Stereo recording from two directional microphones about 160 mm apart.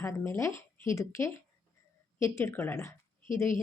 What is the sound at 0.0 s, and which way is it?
Speech, 15° left (ahead or behind).